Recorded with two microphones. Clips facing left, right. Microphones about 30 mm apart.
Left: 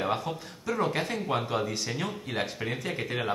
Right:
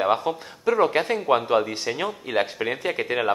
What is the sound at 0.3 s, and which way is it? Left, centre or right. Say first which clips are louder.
Speech: right 9 dB; right.